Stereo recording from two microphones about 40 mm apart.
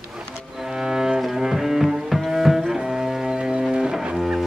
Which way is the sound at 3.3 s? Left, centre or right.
Right.